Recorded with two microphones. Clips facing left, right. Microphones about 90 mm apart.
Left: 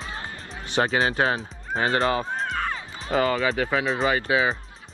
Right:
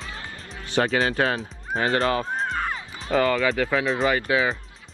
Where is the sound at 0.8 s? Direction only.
35° left (ahead or behind).